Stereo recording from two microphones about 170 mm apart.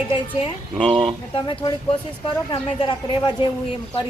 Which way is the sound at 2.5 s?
25° left (ahead or behind).